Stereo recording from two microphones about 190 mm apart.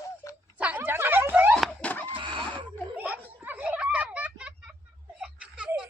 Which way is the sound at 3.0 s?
10° right (ahead or behind).